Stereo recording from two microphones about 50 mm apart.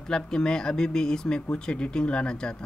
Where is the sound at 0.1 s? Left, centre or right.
Centre.